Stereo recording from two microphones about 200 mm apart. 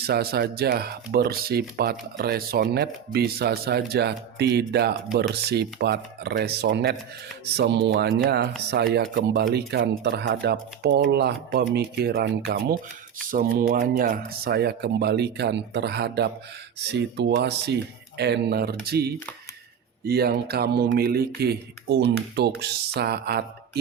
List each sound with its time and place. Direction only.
0.0 s speech: 50° right (ahead or behind)